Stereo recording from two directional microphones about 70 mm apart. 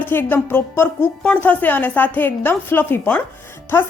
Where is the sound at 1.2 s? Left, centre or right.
Centre.